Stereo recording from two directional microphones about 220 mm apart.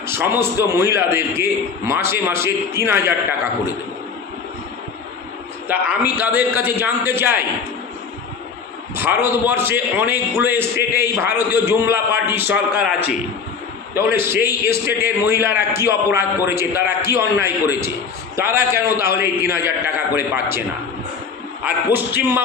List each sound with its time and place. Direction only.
0.1 s a man's voice: 10° right (ahead or behind)
5.6 s a man's voice: 10° right (ahead or behind)
9.0 s a man's voice: 10° right (ahead or behind)
10.8 s a man's voice: 45° left (ahead or behind)
11.2 s a man's voice: 10° right (ahead or behind)
12.7 s a man's voice: 45° left (ahead or behind)
13.9 s a man's voice: 10° right (ahead or behind)
21.9 s a man's voice: 10° right (ahead or behind)